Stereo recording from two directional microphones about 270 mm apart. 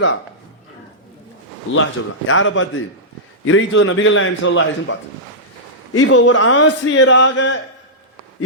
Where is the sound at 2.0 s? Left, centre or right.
Left.